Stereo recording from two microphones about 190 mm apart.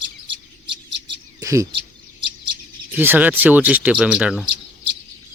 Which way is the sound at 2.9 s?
10° right (ahead or behind).